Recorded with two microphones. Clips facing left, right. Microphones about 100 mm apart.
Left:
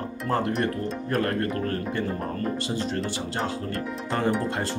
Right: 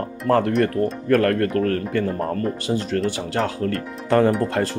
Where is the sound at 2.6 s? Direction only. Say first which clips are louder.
Right 6 dB; 55° right (ahead or behind).